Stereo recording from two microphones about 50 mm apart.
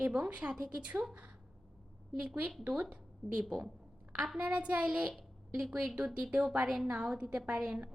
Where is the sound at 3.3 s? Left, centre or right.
Centre.